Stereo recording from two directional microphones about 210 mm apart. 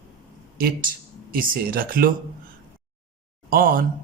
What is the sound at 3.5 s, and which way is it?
Speech, 40° right (ahead or behind).